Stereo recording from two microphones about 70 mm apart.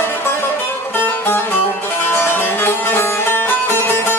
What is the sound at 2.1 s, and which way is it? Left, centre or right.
Music, left.